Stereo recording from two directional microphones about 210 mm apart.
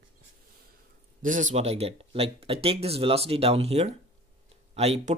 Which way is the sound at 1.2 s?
35° right (ahead or behind).